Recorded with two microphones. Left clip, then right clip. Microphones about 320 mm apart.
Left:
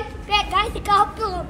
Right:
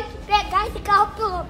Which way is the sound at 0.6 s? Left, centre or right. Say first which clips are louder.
Even; centre.